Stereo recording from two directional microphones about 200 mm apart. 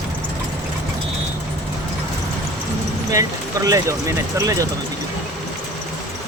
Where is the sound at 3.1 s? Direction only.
15° right (ahead or behind).